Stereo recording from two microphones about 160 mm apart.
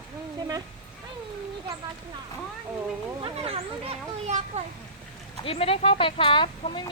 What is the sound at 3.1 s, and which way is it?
Speech, 35° right (ahead or behind).